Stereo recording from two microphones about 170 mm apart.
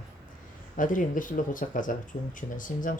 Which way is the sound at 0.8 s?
50° left (ahead or behind).